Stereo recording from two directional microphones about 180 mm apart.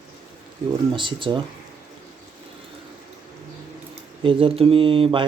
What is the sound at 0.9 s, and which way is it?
Speech, 25° right (ahead or behind).